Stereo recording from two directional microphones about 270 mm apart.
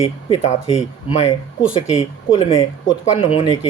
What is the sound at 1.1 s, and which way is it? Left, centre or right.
Speech, left.